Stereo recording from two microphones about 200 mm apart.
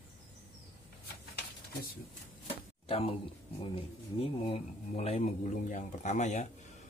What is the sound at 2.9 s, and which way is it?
Speech, 25° left (ahead or behind).